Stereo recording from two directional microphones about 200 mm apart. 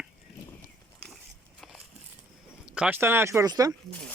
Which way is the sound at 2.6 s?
5° right (ahead or behind).